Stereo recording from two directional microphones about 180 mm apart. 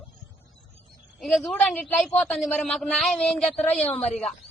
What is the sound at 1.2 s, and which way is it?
A man's voice, centre (ahead or behind).